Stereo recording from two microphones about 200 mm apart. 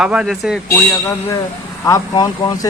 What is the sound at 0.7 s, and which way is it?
Speech, 15° left (ahead or behind).